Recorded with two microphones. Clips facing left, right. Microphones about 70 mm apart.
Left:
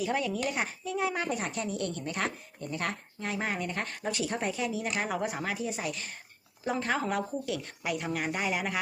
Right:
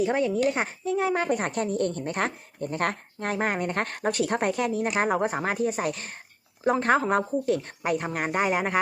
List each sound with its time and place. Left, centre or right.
0.0 s a woman's voice: right
4.9 s a woman's voice: right